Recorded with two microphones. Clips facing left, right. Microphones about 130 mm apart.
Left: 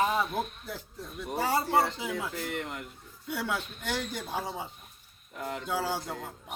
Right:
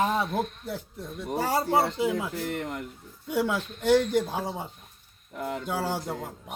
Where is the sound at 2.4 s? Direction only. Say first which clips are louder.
Right 4 dB; 45° right (ahead or behind).